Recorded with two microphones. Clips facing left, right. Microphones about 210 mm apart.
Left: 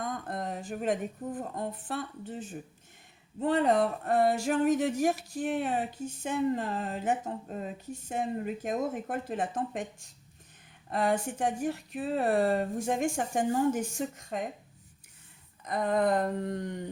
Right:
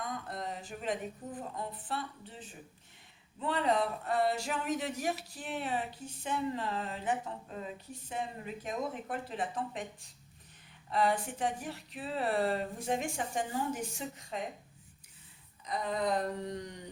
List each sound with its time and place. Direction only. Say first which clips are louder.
0.0 s speech: left 4 dB; 50° left (ahead or behind)
10.8 s speech: left 2 dB; 45° left (ahead or behind)
15.6 s speech: left 6 dB; 55° left (ahead or behind)